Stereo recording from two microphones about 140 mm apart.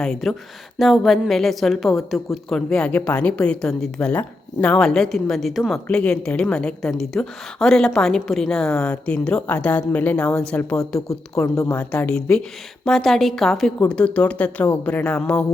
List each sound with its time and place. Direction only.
0.0 s a woman's voice: centre (ahead or behind)
11.1 s a woman's voice: 25° left (ahead or behind)
11.8 s a woman's voice: 10° left (ahead or behind)